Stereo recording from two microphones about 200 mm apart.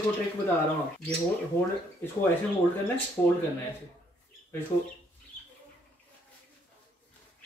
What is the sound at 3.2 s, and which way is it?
Speech, 15° left (ahead or behind).